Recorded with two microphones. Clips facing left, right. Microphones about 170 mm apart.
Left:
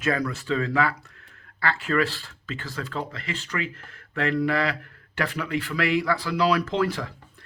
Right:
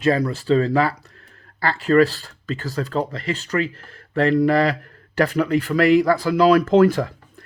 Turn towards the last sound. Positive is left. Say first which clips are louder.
# right 10 dB
turn(degrees=-45)  # may be behind; listen again after turning